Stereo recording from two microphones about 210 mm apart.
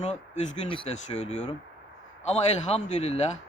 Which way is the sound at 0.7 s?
30° left (ahead or behind).